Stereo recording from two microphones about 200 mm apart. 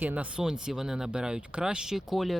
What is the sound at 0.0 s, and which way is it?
Speech, 10° right (ahead or behind).